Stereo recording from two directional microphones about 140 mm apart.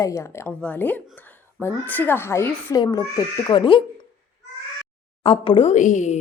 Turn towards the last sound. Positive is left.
turn(degrees=60)  # may be behind; listen again after turning